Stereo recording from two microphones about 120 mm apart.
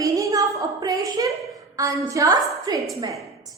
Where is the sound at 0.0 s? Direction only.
30° right (ahead or behind).